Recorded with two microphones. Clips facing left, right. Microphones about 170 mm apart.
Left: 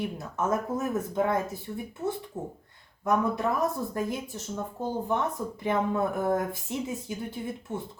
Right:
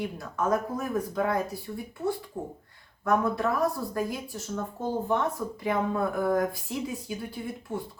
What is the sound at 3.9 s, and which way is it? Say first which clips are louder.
Speech: even; 20° left (ahead or behind).